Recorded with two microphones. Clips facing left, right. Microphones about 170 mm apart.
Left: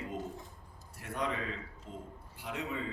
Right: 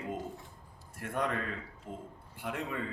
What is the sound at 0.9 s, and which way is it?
Speech, 55° right (ahead or behind).